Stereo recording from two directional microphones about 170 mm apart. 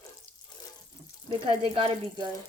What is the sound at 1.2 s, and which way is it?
Speech, 30° right (ahead or behind).